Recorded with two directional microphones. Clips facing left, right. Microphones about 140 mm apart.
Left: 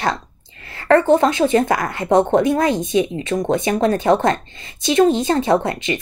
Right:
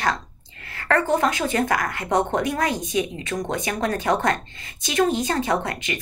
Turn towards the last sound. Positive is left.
turn(degrees=25)  # may be behind; listen again after turning